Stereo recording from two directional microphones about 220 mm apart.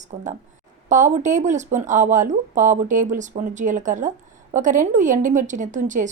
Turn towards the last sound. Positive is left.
turn(degrees=-35)  # may be behind; listen again after turning